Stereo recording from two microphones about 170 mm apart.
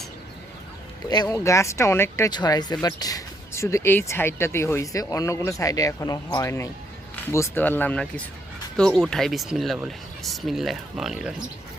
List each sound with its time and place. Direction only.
1.1 s speech: 20° left (ahead or behind); by 11.3 s centre (ahead or behind)